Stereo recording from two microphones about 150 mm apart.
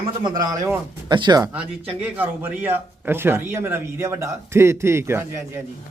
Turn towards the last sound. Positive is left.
turn(degrees=-15)  # may be behind; listen again after turning